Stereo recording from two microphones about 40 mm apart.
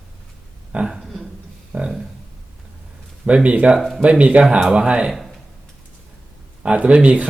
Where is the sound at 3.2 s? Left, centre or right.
Right.